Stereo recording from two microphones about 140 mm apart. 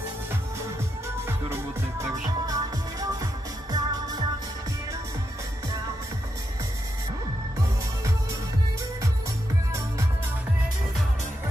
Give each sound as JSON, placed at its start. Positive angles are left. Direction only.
{"t": 0.3, "sound": "music", "side_deg": -20}
{"t": 9.7, "sound": "music", "side_deg": -20}